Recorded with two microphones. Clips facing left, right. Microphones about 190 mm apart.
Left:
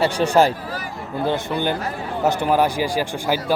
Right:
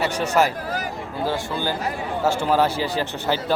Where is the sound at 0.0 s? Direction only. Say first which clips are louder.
Left 4 dB; 30° left (ahead or behind).